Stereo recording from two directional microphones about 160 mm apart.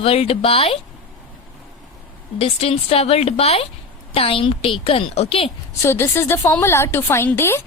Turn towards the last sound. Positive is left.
turn(degrees=15)  # may be behind; listen again after turning